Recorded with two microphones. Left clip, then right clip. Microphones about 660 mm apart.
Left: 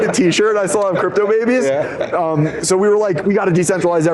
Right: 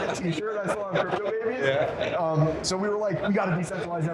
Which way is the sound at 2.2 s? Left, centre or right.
Left.